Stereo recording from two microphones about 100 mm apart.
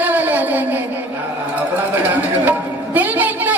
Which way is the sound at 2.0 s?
20° right (ahead or behind).